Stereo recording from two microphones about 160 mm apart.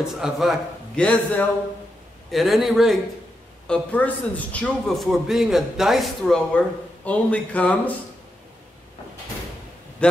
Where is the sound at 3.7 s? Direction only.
10° left (ahead or behind).